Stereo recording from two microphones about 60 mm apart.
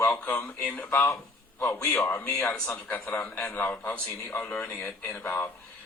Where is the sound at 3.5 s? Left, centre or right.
Left.